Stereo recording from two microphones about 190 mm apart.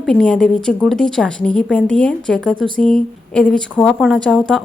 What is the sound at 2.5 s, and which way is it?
Speech, 25° right (ahead or behind).